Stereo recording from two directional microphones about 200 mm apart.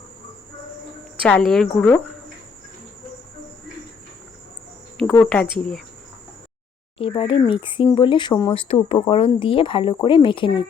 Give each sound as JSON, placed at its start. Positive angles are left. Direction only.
{"t": 1.2, "sound": "a woman's voice", "side_deg": 5}
{"t": 5.2, "sound": "a woman's voice", "side_deg": 5}
{"t": 7.0, "sound": "speech", "side_deg": 25}